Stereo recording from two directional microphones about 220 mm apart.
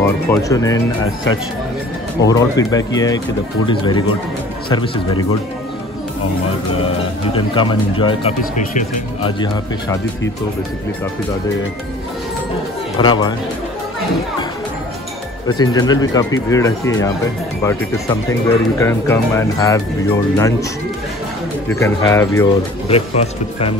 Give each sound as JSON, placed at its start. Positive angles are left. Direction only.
{"t": 0.0, "sound": "speech", "side_deg": 15}
{"t": 2.2, "sound": "speech", "side_deg": 15}
{"t": 7.3, "sound": "speech", "side_deg": 20}
{"t": 13.0, "sound": "speech", "side_deg": 20}
{"t": 15.4, "sound": "speech", "side_deg": 15}
{"t": 18.8, "sound": "speech", "side_deg": 10}
{"t": 21.7, "sound": "speech", "side_deg": 10}
{"t": 22.8, "sound": "speech", "side_deg": 25}